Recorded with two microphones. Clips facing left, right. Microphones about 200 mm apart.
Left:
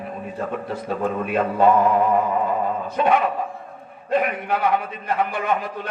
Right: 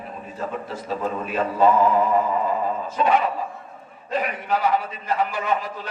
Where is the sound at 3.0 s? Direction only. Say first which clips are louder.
Left 1 dB; 55° left (ahead or behind).